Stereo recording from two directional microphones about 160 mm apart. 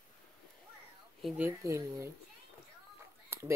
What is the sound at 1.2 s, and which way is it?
Speech, 10° right (ahead or behind).